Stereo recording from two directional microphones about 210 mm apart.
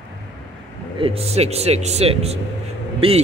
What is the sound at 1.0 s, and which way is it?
Speech, 25° right (ahead or behind).